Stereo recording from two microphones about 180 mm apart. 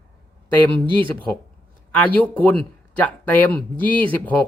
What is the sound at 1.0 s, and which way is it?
Speech, 10° left (ahead or behind).